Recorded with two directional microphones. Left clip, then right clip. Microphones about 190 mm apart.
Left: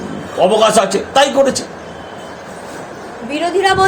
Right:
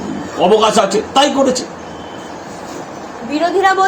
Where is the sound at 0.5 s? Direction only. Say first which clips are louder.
Right 1 dB; 65° left (ahead or behind).